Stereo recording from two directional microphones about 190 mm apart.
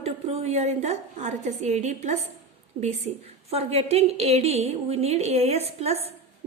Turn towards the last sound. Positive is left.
turn(degrees=-35)  # may be behind; listen again after turning